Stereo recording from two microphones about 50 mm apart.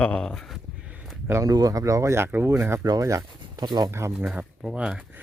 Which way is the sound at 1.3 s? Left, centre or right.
Right.